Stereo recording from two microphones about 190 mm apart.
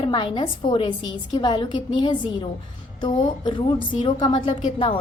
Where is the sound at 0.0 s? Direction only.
25° left (ahead or behind).